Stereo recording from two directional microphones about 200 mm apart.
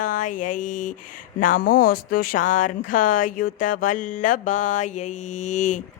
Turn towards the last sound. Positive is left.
turn(degrees=35)  # may be behind; listen again after turning